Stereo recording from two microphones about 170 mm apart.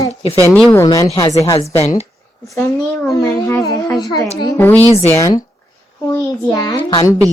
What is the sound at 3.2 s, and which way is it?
A child's voice, 15° left (ahead or behind).